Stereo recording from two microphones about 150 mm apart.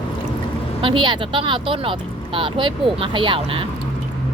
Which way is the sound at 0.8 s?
35° right (ahead or behind).